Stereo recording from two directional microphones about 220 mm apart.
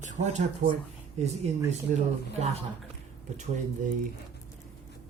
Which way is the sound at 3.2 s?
35° right (ahead or behind).